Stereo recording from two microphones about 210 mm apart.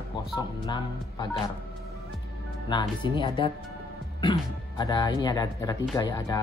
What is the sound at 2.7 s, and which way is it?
Speech, 20° left (ahead or behind).